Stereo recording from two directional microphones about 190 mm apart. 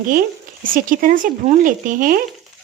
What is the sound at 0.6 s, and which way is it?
A woman's voice, 45° right (ahead or behind).